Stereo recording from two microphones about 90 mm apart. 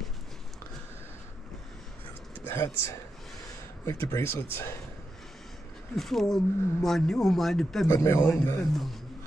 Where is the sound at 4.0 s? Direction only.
25° left (ahead or behind).